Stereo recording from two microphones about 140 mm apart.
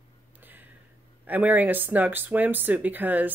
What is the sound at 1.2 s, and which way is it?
Speech, 10° right (ahead or behind).